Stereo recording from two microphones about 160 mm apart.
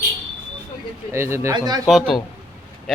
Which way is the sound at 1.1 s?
15° right (ahead or behind).